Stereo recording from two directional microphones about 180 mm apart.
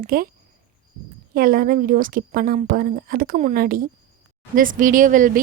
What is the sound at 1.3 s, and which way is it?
A woman's voice, 55° right (ahead or behind).